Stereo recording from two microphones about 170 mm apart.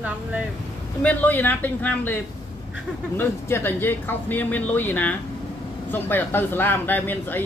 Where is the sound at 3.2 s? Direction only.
15° left (ahead or behind).